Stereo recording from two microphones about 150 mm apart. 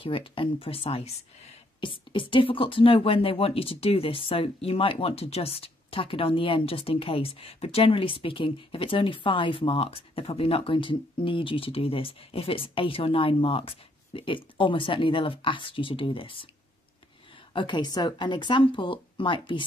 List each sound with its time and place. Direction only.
0.0 s speech: 35° left (ahead or behind)
17.5 s speech: 30° left (ahead or behind)